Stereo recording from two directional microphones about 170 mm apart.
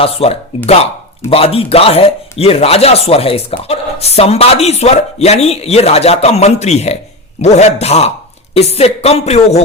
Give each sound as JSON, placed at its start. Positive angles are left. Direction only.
{"t": 0.0, "sound": "speech", "side_deg": 35}